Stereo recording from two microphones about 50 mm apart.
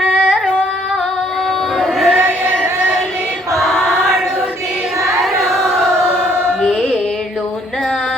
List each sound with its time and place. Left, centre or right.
0.0 s carnatic music: right
1.8 s chant: centre
3.6 s choir: centre
5.0 s chant: centre
6.5 s music: centre